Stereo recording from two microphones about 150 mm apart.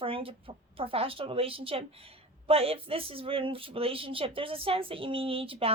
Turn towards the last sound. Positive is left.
turn(degrees=-40)  # may be behind; listen again after turning